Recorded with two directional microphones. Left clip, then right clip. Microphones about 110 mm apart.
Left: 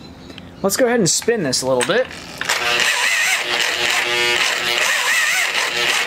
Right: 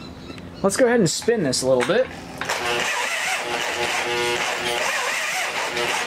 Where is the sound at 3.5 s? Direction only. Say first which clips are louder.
Left 6 dB; 35° left (ahead or behind).